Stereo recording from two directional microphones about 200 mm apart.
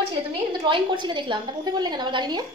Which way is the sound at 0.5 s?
20° right (ahead or behind).